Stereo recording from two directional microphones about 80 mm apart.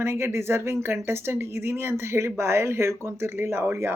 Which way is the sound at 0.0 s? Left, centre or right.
Right.